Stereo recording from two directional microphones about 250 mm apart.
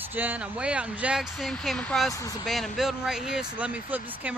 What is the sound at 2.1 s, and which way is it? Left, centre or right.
Speech, centre.